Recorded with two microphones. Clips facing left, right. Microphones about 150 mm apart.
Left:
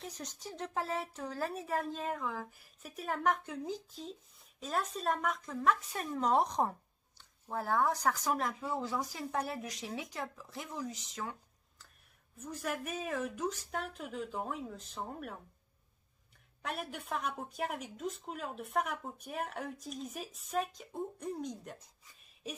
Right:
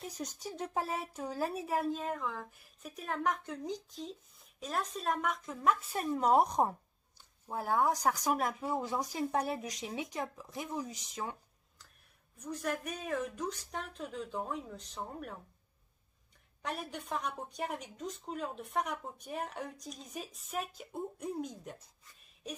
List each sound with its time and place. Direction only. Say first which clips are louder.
0.0 s speech: right 3 dB; 10° right (ahead or behind)
12.4 s speech: right 2 dB; 5° left (ahead or behind)
16.6 s speech: even; centre (ahead or behind)